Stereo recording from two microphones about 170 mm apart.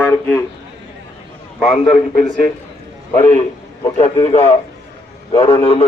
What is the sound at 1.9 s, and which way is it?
Speech, 45° left (ahead or behind).